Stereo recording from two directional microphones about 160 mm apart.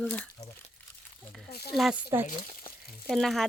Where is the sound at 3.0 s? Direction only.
Centre (ahead or behind).